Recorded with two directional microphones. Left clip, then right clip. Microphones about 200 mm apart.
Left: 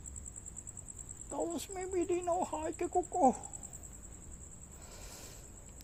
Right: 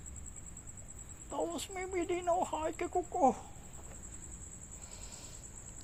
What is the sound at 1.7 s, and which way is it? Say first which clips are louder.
Speech: left 1 dB; 40° left (ahead or behind).